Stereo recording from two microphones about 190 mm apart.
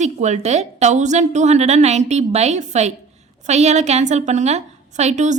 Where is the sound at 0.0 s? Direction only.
35° right (ahead or behind).